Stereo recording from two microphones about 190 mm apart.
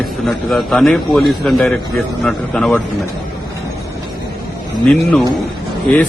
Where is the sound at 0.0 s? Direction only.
Centre (ahead or behind).